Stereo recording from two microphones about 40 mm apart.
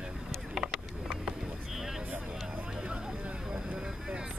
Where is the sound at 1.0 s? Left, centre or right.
Right.